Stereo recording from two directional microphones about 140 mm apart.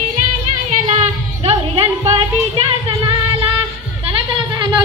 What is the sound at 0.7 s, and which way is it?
Music, 50° right (ahead or behind).